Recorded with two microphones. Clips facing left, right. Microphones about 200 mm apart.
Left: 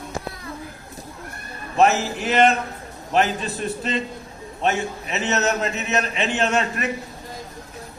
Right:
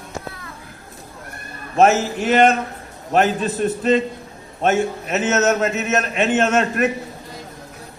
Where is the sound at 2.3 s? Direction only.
45° right (ahead or behind).